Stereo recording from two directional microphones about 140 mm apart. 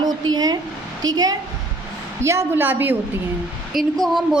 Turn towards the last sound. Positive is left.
turn(degrees=0)  # may be behind; listen again after turning